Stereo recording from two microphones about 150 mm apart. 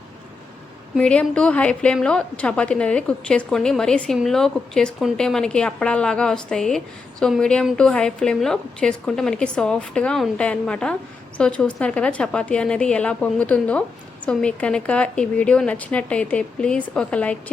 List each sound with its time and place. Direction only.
0.9 s a woman's voice: 5° left (ahead or behind)